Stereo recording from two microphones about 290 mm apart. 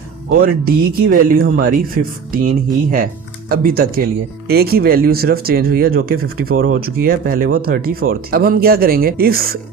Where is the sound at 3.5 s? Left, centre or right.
Right.